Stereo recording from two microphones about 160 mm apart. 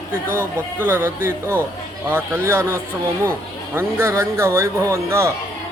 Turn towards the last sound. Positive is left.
turn(degrees=-15)  # may be behind; listen again after turning